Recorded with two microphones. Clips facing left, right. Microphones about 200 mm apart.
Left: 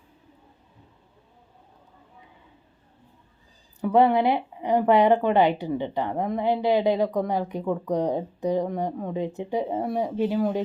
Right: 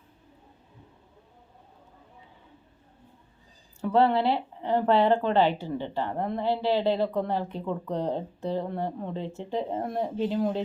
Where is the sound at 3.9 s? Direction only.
15° left (ahead or behind).